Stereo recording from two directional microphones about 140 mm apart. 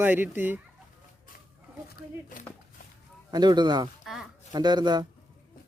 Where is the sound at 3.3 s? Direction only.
30° right (ahead or behind).